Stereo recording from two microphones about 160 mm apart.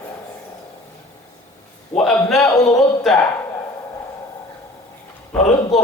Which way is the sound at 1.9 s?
5° left (ahead or behind).